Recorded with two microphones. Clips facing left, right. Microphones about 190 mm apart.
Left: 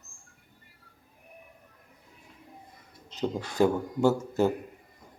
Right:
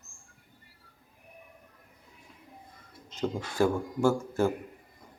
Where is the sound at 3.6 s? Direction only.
20° left (ahead or behind).